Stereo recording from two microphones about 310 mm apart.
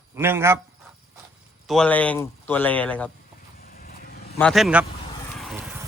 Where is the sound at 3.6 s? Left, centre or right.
Left.